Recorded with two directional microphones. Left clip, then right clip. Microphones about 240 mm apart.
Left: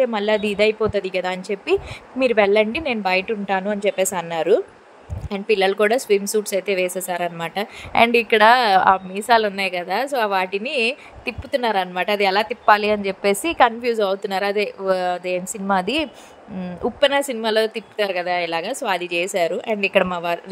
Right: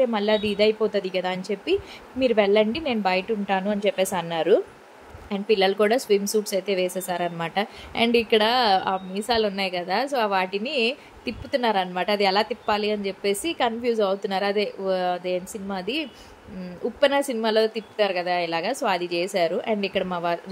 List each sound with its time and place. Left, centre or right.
0.0 s a woman's voice: centre